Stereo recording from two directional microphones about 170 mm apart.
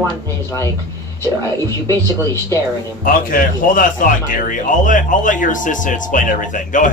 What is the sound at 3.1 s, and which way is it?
A man's voice, 55° left (ahead or behind).